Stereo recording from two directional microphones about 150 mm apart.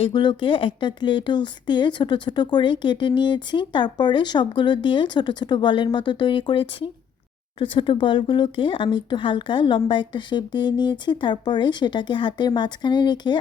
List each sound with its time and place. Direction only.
0.0 s speech: 30° left (ahead or behind)